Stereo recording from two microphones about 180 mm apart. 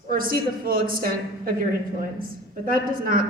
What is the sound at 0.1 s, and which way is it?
A woman's voice, 50° right (ahead or behind).